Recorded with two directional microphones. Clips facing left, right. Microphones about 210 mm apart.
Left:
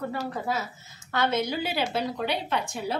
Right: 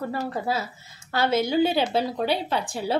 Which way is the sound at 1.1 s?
30° right (ahead or behind).